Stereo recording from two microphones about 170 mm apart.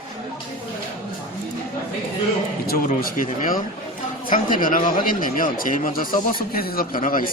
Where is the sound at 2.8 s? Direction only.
50° left (ahead or behind).